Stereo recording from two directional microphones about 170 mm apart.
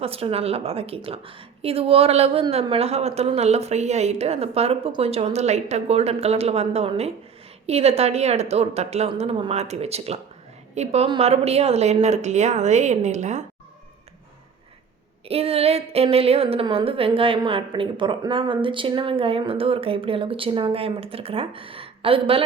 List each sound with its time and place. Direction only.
0.0 s a woman's voice: 35° right (ahead or behind)
15.3 s a woman's voice: 35° right (ahead or behind)